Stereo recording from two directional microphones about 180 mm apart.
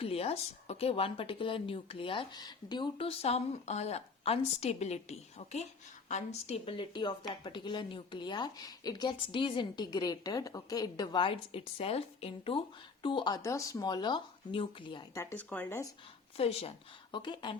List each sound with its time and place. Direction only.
0.0 s speech: 35° left (ahead or behind)
15.2 s speech: 10° left (ahead or behind)
16.4 s speech: 35° left (ahead or behind)